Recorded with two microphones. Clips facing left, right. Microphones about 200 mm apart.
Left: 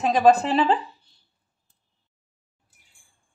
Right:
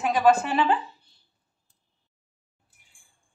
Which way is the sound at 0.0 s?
35° left (ahead or behind).